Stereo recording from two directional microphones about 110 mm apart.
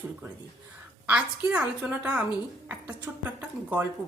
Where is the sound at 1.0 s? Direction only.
10° right (ahead or behind).